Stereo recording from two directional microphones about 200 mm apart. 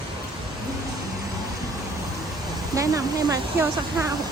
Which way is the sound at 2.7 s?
15° right (ahead or behind).